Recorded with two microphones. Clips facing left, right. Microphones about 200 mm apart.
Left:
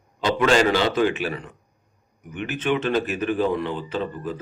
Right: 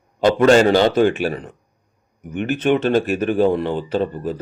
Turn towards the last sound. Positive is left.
turn(degrees=-40)  # may be behind; listen again after turning